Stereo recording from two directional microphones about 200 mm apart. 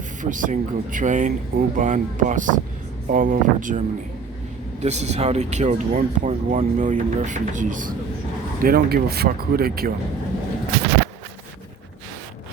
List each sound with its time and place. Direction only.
0.2 s speech: 40° right (ahead or behind)